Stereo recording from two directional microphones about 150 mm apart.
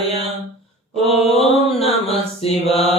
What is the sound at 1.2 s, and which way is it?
Mantra, 40° left (ahead or behind).